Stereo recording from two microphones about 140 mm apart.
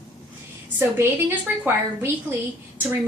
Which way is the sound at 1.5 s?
15° right (ahead or behind).